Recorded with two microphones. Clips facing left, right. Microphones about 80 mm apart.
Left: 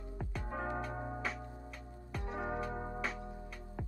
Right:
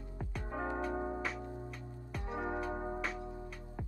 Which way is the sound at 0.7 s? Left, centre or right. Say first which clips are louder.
Right 4 dB; centre.